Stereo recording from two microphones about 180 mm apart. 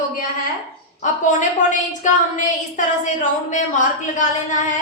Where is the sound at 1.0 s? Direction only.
45° left (ahead or behind).